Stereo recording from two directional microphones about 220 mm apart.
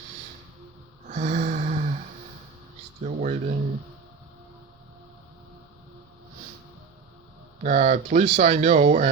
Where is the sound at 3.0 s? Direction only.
35° right (ahead or behind).